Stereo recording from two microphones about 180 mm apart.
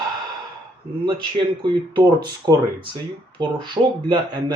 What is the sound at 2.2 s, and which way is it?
Speech, 25° right (ahead or behind).